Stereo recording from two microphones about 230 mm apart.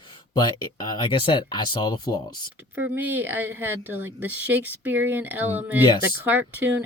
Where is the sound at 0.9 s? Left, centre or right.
Left.